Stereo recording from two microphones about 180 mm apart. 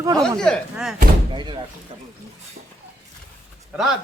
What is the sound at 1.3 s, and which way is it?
Speech, 25° right (ahead or behind).